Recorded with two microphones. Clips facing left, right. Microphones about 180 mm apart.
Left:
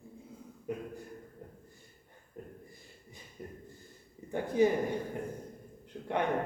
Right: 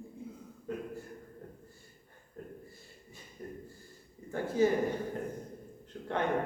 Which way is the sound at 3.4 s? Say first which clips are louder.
Right 2 dB; 10° left (ahead or behind).